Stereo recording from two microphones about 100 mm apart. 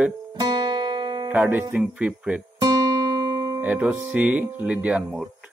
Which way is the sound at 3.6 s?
15° right (ahead or behind).